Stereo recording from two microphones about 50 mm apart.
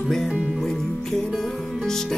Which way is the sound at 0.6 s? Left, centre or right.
Centre.